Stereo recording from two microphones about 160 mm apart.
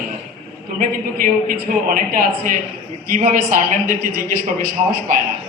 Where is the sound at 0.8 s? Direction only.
65° right (ahead or behind).